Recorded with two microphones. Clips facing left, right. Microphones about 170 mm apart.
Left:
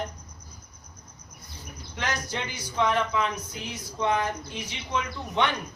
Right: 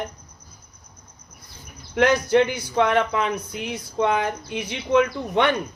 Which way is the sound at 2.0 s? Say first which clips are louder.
Right 14 dB; 60° right (ahead or behind).